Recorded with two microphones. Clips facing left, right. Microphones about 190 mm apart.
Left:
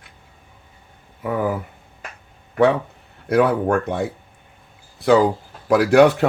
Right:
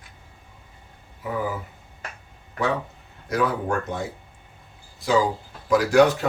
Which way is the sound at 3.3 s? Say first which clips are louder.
Left 7 dB; 60° left (ahead or behind).